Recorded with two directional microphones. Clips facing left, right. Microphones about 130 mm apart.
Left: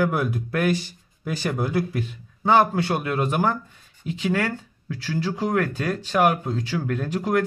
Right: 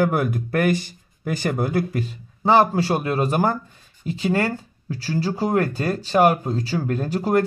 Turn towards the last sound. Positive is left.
turn(degrees=-35)  # may be behind; listen again after turning